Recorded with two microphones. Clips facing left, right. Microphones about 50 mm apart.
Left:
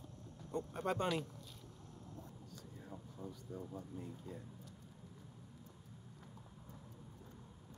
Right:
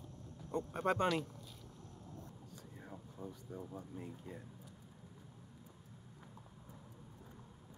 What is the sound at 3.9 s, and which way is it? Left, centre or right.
Speech, right.